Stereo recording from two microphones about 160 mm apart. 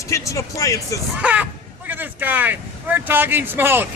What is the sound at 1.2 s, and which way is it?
Speech, 10° right (ahead or behind).